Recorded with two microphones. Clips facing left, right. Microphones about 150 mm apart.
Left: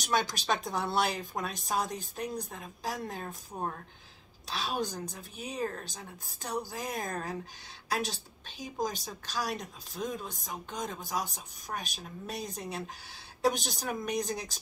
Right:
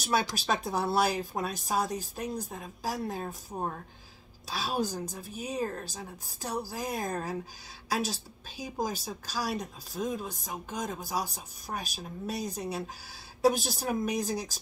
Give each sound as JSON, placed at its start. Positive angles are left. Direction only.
{"t": 0.0, "sound": "speech", "side_deg": -5}